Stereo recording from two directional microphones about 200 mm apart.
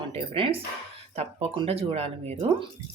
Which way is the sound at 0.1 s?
25° right (ahead or behind).